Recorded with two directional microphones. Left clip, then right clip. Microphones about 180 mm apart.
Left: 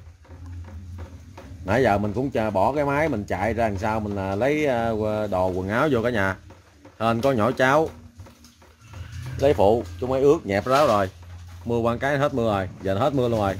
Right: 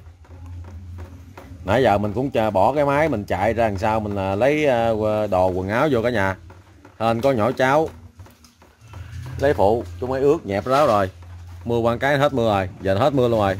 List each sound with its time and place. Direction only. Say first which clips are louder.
1.7 s speech: right 3 dB; 15° right (ahead or behind)
9.4 s speech: right 1 dB; 5° right (ahead or behind); by 13.6 s 25° right (ahead or behind)